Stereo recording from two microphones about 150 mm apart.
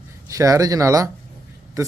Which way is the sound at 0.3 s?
20° right (ahead or behind).